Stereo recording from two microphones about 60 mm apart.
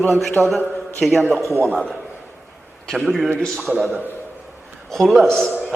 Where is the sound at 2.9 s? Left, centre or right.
Centre.